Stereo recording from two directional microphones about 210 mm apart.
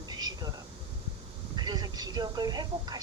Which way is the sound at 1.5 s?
20° right (ahead or behind).